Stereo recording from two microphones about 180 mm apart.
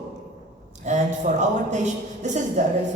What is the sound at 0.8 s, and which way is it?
Speech, 40° right (ahead or behind).